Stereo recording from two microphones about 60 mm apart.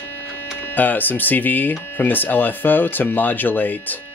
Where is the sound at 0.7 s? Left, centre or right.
Left.